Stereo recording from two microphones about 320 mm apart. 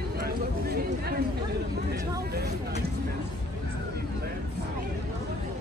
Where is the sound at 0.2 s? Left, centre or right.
Right.